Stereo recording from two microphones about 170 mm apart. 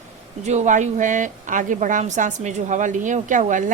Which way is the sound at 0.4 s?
45° right (ahead or behind).